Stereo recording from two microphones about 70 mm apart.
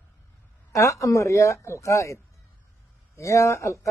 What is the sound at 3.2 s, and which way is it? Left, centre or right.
Speech, left.